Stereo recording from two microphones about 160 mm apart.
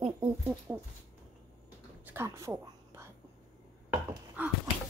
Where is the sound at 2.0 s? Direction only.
15° right (ahead or behind).